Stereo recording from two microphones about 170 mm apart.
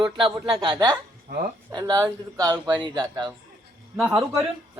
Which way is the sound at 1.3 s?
55° right (ahead or behind).